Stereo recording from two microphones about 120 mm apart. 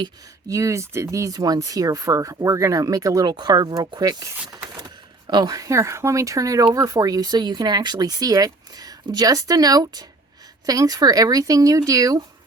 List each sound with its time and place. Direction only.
0.0 s speech: 30° right (ahead or behind)
4.5 s a sound: 35° right (ahead or behind)
5.3 s speech: 35° right (ahead or behind)